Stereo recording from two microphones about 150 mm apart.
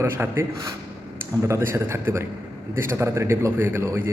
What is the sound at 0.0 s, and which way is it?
A man's voice, 15° right (ahead or behind).